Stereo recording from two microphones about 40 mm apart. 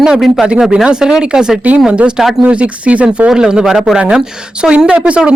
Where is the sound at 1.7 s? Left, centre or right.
Right.